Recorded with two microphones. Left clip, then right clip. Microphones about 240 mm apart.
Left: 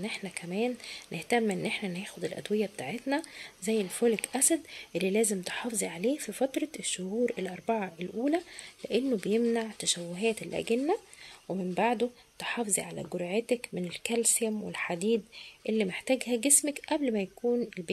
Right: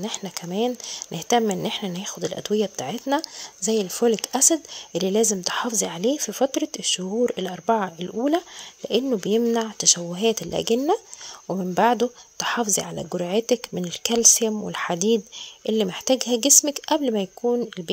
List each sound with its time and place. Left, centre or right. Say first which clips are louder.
0.0 s speech: right 6 dB; right